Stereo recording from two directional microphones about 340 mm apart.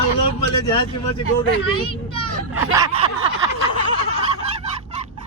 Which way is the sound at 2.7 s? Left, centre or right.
Centre.